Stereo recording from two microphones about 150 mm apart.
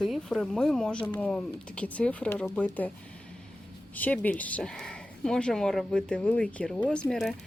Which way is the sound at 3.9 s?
10° left (ahead or behind).